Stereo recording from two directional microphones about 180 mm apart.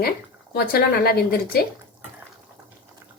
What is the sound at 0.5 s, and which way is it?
Speech, 60° left (ahead or behind).